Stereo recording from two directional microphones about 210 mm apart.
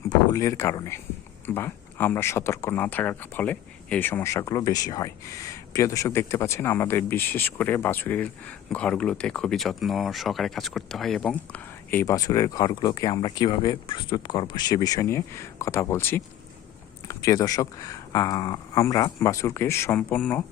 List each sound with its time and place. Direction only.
0.1 s speech: 15° left (ahead or behind)